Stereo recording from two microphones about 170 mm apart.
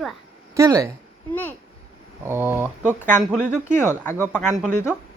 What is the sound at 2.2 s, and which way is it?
Speech, 15° right (ahead or behind).